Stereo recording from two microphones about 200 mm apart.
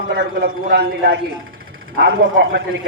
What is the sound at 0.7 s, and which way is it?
Speech, 50° right (ahead or behind).